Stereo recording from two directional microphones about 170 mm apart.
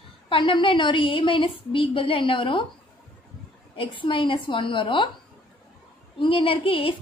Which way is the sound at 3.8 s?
30° left (ahead or behind).